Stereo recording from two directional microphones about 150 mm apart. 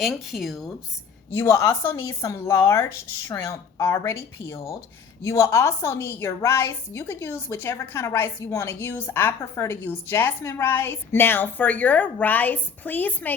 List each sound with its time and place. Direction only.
0.0 s speech: centre (ahead or behind)
1.3 s a woman's voice: 15° left (ahead or behind)